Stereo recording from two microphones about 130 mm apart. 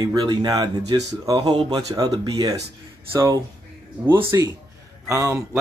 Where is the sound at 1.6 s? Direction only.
45° right (ahead or behind).